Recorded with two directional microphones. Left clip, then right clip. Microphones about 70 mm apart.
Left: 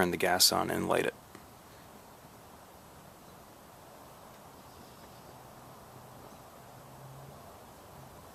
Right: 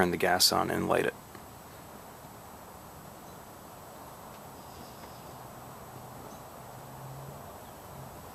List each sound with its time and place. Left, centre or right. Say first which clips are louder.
0.0 s speech: right 1 dB; left